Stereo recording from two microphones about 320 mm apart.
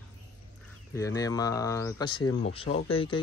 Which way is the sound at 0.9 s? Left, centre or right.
Centre.